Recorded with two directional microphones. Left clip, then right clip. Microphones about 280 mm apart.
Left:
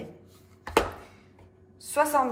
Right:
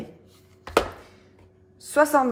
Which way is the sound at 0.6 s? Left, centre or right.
Centre.